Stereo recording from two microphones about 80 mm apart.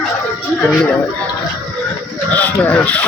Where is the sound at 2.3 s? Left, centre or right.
Centre.